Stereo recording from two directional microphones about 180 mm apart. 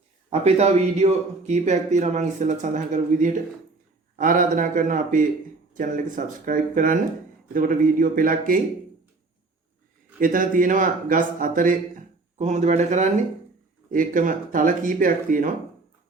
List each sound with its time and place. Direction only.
0.3 s a man's voice: 35° right (ahead or behind)
10.2 s a man's voice: 50° right (ahead or behind)